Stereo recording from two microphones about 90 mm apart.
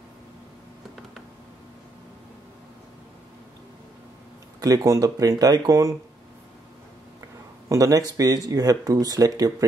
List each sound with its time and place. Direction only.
4.6 s speech: 45° right (ahead or behind)
7.7 s speech: 40° right (ahead or behind)